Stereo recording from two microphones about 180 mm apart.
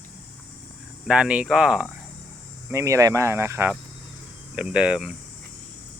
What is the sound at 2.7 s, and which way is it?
Speech, 15° right (ahead or behind).